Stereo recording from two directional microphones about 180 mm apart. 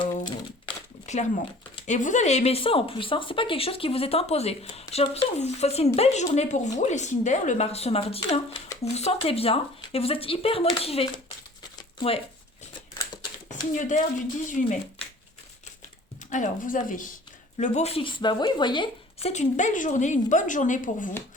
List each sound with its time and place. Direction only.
0.0 s a sound: 25° left (ahead or behind)
1.0 s speech: 40° left (ahead or behind)
11.8 s a sound: 30° left (ahead or behind)
13.7 s speech: 45° left (ahead or behind)
16.3 s speech: 45° left (ahead or behind)
17.6 s speech: 35° left (ahead or behind)
19.3 s speech: 40° left (ahead or behind)